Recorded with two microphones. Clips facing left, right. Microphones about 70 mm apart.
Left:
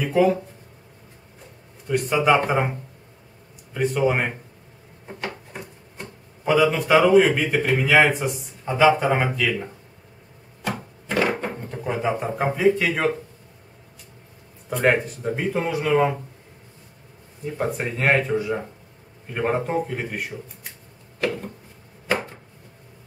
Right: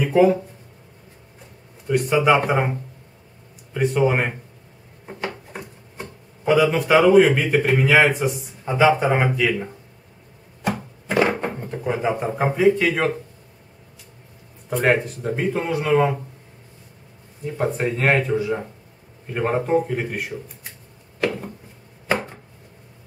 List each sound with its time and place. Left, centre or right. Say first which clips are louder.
1.9 s speech: right 2 dB; centre
11.1 s a sound: right 3 dB; centre
11.5 s music: right 2 dB; centre
12.1 s speech: right 1 dB; centre
14.7 s speech: right 1 dB; centre
17.6 s speech: right 2 dB; centre
22.1 s chopping: right 1 dB; centre